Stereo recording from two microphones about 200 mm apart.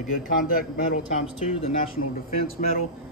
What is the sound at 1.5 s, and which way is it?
Speech, 30° left (ahead or behind).